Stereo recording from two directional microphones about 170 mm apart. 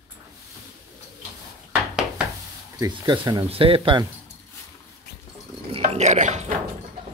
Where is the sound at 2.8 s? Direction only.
25° right (ahead or behind).